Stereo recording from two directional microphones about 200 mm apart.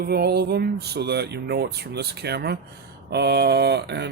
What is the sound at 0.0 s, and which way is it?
Speech, 50° right (ahead or behind).